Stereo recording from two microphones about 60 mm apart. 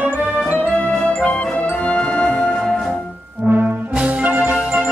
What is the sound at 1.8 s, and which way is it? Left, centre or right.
Music, centre.